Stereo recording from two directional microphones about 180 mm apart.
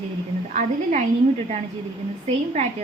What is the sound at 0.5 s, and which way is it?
Speech, 40° right (ahead or behind).